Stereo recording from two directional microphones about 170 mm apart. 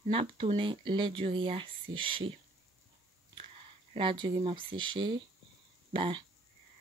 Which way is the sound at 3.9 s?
30° right (ahead or behind).